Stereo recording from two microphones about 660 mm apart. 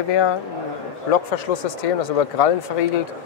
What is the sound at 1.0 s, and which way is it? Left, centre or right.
Speech, left.